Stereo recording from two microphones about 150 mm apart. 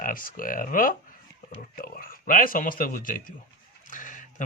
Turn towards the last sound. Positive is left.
turn(degrees=60)  # may be behind; listen again after turning